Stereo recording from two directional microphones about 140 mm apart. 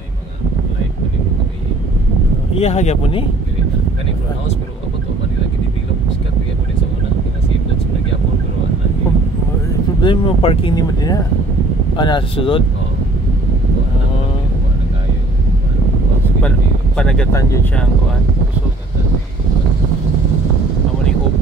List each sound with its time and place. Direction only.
2.5 s speech: 50° left (ahead or behind)
10.0 s speech: 40° left (ahead or behind)
10.7 s speech: 30° left (ahead or behind)
16.4 s a sound: 5° left (ahead or behind)
17.3 s speech: 20° left (ahead or behind)